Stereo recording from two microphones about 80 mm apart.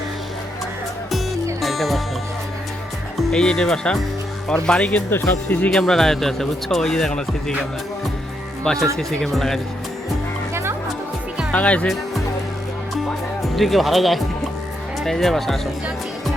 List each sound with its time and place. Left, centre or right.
1.6 s music: centre
3.2 s speech: centre; by 5.7 s left
5.7 s speech: centre
8.6 s speech: centre
10.5 s music: right
11.5 s speech: centre
13.6 s speech: centre